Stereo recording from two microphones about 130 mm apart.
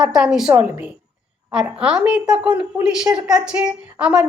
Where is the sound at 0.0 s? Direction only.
5° right (ahead or behind).